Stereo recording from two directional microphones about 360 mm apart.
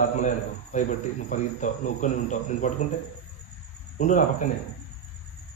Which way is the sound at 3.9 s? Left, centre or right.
Centre.